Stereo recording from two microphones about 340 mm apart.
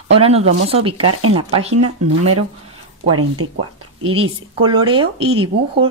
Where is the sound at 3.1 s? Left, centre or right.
Right.